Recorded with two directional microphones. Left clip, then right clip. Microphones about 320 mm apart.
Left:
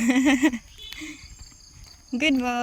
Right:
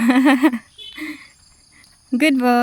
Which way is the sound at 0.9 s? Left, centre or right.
Centre.